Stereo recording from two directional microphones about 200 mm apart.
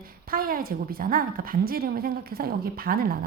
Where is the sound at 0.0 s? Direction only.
45° right (ahead or behind).